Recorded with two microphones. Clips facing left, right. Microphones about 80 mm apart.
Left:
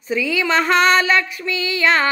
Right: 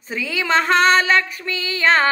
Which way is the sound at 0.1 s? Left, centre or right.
Right.